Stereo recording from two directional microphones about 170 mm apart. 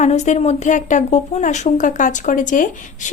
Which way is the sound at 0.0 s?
40° left (ahead or behind).